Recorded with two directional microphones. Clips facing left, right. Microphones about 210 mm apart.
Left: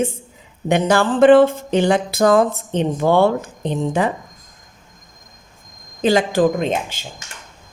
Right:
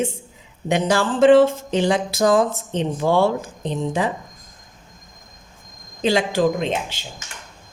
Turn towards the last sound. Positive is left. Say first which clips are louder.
# left 3 dB
turn(degrees=45)  # may be behind; listen again after turning